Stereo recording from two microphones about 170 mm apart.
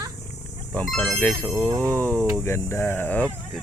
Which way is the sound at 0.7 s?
Centre (ahead or behind).